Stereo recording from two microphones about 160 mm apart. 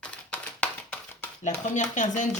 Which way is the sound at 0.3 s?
10° left (ahead or behind).